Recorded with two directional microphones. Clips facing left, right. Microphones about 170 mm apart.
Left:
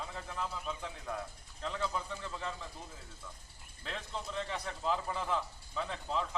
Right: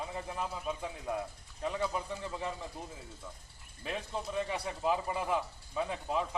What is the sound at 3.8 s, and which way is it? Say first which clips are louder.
A man's voice: right 4 dB; 15° right (ahead or behind).